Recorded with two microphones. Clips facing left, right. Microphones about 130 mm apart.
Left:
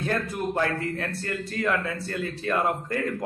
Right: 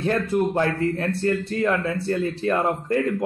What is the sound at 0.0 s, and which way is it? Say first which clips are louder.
A man's voice: right 6 dB; 25° right (ahead or behind).